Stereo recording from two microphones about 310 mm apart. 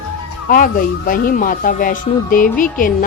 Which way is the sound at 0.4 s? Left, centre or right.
Left.